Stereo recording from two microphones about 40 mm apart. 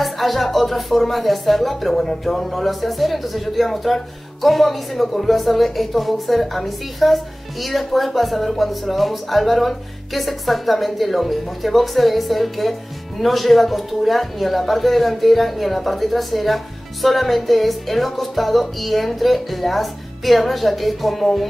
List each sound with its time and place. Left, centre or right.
0.0 s speech: centre